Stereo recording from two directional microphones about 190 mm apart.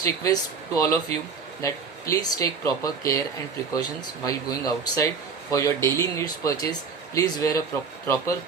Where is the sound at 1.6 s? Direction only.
15° left (ahead or behind).